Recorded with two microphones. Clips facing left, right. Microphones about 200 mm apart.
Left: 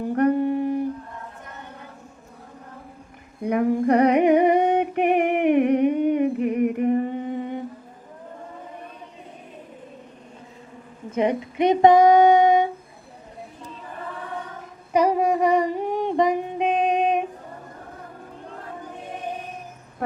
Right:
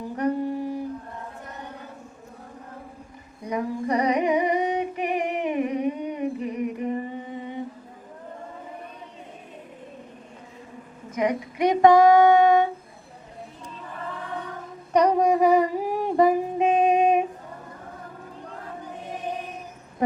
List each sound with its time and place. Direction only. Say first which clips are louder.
0.2 s humming: left 5 dB; 60° left (ahead or behind)
3.4 s humming: left 7 dB; 60° left (ahead or behind)
11.1 s female singing: left 3 dB; 25° left (ahead or behind)
14.9 s humming: even; 5° left (ahead or behind)